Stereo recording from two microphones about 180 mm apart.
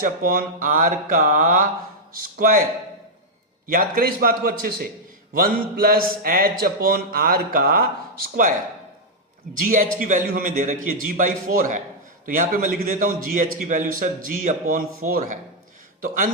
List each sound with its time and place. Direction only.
0.0 s a man's voice: 50° right (ahead or behind)
3.7 s a man's voice: 55° right (ahead or behind)
9.6 s a man's voice: 45° right (ahead or behind)